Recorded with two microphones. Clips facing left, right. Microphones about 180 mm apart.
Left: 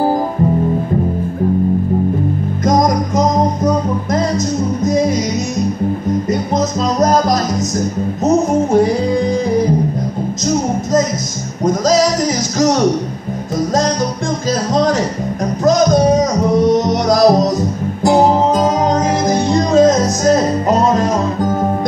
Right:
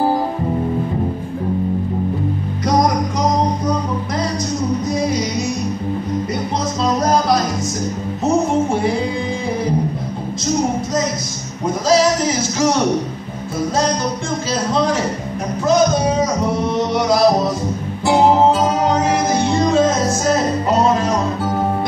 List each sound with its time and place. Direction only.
3.2 s music: 45° left (ahead or behind)
8.3 s music: 40° left (ahead or behind)
15.6 s music: 40° left (ahead or behind)